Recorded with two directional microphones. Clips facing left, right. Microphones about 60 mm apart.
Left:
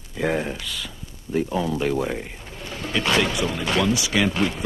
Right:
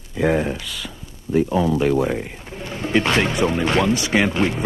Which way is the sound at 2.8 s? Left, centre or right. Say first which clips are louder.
Right 3 dB; right.